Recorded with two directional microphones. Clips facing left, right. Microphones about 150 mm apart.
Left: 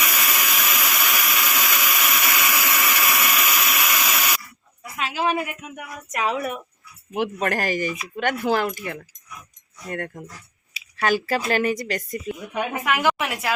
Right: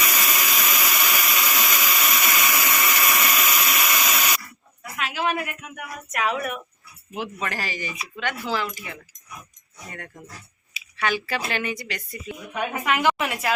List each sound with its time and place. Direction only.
0.2 s a sound: centre (ahead or behind)
4.9 s speech: 25° left (ahead or behind)
7.1 s speech: 55° left (ahead or behind)
10.9 s a woman's voice: 40° left (ahead or behind)
12.7 s a woman's voice: centre (ahead or behind)